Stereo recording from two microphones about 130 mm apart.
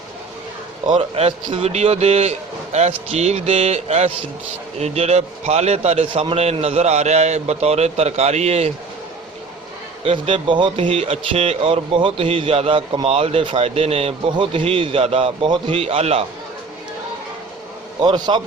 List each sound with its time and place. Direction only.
0.9 s a man's voice: 50° right (ahead or behind)
10.0 s speech: 45° right (ahead or behind)
18.0 s a man's voice: 35° right (ahead or behind)